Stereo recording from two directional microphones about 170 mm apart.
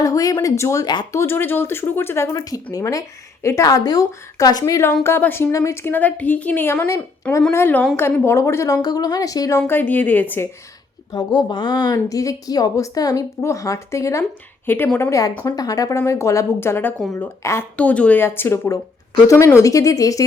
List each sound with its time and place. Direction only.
0.0 s a woman's voice: 20° left (ahead or behind)
11.1 s a woman's voice: 20° left (ahead or behind)